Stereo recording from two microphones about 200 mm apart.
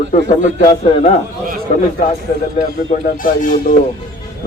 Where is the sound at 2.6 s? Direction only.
30° left (ahead or behind).